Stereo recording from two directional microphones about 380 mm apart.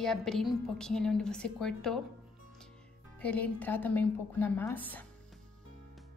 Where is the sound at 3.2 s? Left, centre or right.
Centre.